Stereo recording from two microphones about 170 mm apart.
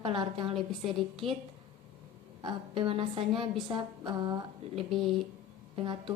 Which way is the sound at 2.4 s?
30° right (ahead or behind).